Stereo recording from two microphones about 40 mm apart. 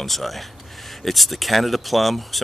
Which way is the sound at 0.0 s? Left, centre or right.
Centre.